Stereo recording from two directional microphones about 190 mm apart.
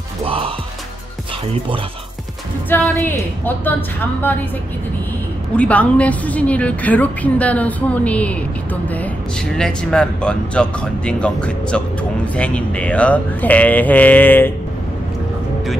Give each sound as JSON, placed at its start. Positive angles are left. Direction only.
{"t": 0.2, "sound": "music", "side_deg": -30}
{"t": 2.7, "sound": "a woman's voice", "side_deg": 10}
{"t": 5.6, "sound": "a woman's voice", "side_deg": 5}